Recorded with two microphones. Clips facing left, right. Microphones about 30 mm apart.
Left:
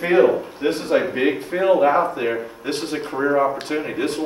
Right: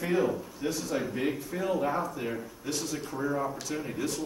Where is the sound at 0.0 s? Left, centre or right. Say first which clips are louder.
Left 12 dB; left.